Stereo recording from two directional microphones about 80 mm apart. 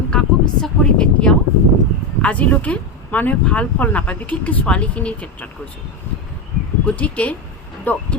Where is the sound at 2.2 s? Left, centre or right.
Centre.